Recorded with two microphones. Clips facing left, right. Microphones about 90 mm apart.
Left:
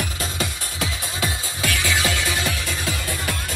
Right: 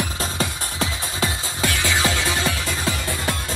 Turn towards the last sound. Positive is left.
turn(degrees=-25)  # may be behind; listen again after turning